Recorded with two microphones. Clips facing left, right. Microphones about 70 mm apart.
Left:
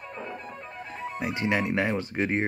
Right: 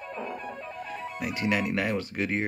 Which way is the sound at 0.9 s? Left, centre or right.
Left.